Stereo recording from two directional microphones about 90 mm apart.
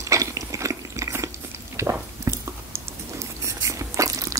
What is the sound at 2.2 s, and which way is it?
Chewing, 30° right (ahead or behind).